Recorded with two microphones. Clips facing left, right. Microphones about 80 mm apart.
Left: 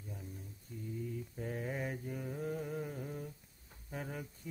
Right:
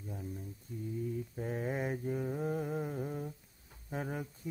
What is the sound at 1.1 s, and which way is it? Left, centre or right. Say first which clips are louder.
Mantra: right 4 dB; right.